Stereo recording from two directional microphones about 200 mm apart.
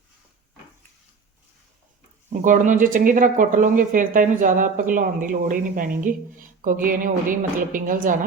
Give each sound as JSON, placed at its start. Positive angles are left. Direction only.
{"t": 2.3, "sound": "a woman's voice", "side_deg": -40}